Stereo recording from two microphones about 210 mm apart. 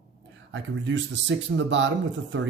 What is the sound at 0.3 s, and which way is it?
Speech, 60° right (ahead or behind).